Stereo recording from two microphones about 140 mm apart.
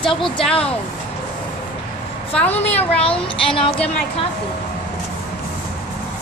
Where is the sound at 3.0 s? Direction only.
40° left (ahead or behind).